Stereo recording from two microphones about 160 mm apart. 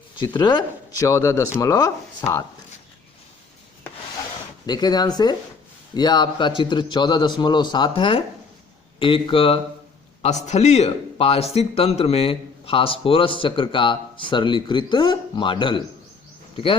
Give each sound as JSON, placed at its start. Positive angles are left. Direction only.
{"t": 0.2, "sound": "speech", "side_deg": 30}
{"t": 4.6, "sound": "a man's voice", "side_deg": 25}